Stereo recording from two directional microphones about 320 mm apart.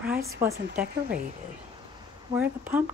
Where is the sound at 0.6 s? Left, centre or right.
Right.